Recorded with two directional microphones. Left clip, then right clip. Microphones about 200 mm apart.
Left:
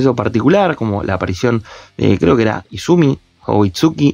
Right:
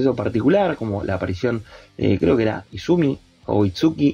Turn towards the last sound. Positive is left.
turn(degrees=35)  # may be behind; listen again after turning